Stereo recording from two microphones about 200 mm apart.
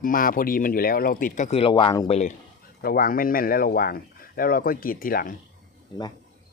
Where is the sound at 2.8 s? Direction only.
45° left (ahead or behind).